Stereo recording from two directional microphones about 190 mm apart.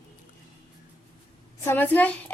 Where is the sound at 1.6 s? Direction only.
10° left (ahead or behind).